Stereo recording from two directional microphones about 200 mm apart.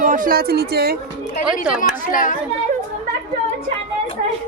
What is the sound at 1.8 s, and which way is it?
Speech, 40° left (ahead or behind).